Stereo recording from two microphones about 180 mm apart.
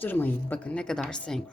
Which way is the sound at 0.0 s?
10° left (ahead or behind).